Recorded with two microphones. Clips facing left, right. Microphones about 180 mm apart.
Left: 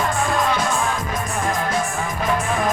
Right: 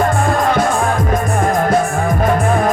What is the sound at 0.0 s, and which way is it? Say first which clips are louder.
Music: right 6 dB; 50° right (ahead or behind).